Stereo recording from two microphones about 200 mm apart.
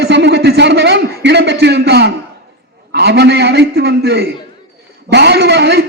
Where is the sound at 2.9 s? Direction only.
55° right (ahead or behind).